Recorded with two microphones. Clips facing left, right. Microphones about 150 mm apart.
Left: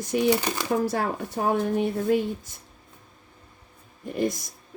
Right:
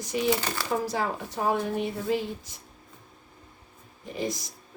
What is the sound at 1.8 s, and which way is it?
Speech, 55° left (ahead or behind).